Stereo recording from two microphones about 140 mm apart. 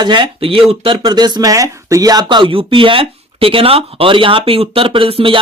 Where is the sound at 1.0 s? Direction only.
30° right (ahead or behind).